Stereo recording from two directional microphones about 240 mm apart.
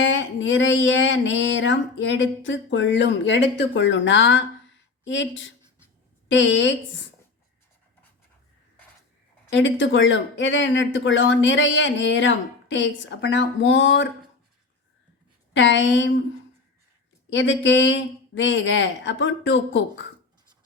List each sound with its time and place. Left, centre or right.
0.0 s speech: left
9.5 s speech: left
15.5 s speech: left
17.2 s speech: left